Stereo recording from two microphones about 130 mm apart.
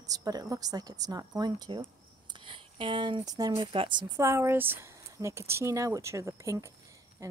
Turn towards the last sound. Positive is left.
turn(degrees=-25)  # may be behind; listen again after turning